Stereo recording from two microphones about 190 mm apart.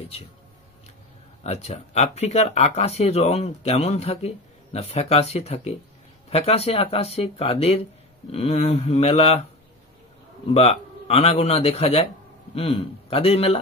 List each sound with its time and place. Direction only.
1.4 s speech: 35° left (ahead or behind)
10.5 s speech: 35° left (ahead or behind)